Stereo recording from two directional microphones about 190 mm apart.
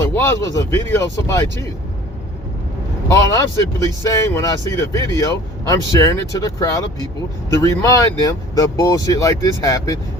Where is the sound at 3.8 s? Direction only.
15° left (ahead or behind).